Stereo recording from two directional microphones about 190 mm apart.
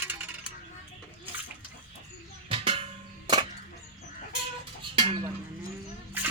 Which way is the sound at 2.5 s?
30° right (ahead or behind).